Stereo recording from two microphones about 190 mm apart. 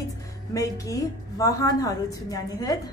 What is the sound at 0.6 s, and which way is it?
A woman's voice, 15° left (ahead or behind).